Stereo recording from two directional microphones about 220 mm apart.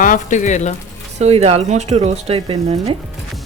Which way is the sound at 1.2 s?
30° right (ahead or behind).